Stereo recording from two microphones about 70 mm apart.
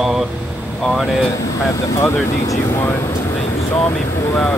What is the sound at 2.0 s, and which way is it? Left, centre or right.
Speech, left.